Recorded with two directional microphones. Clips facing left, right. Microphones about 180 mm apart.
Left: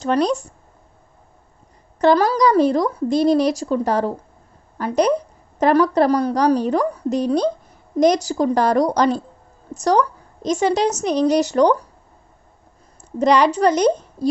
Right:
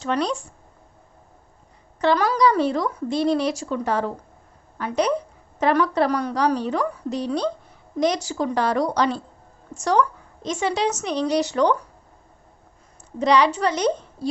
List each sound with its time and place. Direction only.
0.0 s speech: 40° left (ahead or behind)
2.0 s speech: 40° left (ahead or behind)
13.1 s a woman's voice: 45° left (ahead or behind)